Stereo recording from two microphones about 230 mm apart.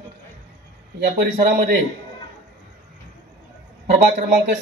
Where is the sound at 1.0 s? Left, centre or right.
Right.